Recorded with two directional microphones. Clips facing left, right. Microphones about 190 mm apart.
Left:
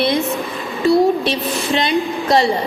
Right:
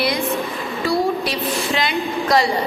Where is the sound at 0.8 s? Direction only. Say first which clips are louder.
Left 7 dB; 25° left (ahead or behind).